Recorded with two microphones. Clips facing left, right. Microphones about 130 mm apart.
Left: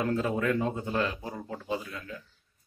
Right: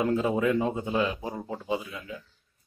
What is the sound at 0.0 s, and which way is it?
A man's voice, 15° right (ahead or behind).